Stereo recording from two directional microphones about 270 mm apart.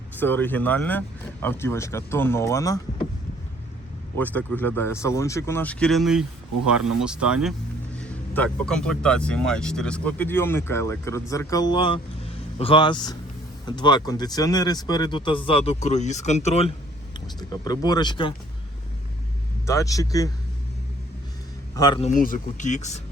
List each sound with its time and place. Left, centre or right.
0.2 s speech: centre
4.2 s speech: centre
19.6 s speech: centre
21.8 s speech: centre